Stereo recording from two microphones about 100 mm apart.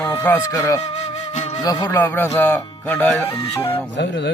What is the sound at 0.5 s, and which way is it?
Speech, 35° left (ahead or behind).